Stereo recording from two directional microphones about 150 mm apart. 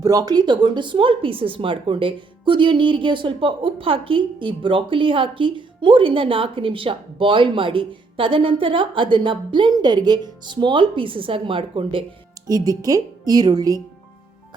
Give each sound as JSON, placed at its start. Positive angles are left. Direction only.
{"t": 0.0, "sound": "speech", "side_deg": -25}
{"t": 12.5, "sound": "speech", "side_deg": -25}